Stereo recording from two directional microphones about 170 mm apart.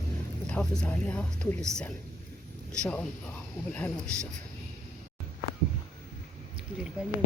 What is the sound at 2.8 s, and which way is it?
Speech, 5° left (ahead or behind).